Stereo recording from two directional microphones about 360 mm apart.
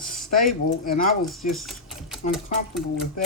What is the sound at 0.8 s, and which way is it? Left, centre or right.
Speech, left.